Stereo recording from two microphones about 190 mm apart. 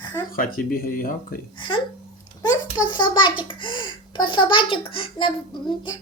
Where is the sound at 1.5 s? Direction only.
25° left (ahead or behind).